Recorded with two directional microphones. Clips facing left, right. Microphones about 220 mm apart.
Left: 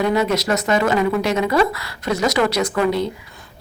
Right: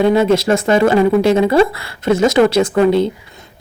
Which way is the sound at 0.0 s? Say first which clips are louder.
Right 6 dB; 25° right (ahead or behind).